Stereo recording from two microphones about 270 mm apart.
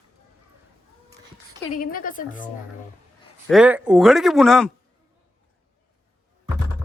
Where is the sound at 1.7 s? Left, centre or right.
Left.